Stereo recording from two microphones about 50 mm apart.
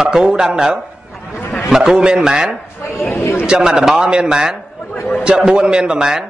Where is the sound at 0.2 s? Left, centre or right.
Centre.